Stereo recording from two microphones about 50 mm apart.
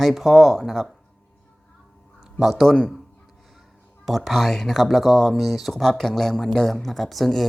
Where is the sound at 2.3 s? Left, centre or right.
Centre.